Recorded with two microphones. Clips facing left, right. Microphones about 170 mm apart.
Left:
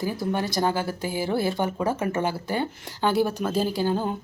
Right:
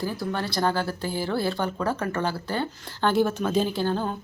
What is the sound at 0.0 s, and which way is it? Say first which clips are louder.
A woman's voice: left 2 dB; 20° left (ahead or behind).